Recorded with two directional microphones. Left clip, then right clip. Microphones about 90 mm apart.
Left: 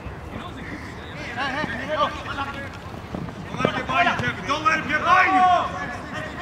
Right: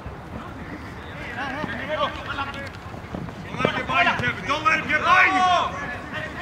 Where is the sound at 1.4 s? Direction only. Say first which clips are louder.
Left 4 dB; 40° left (ahead or behind).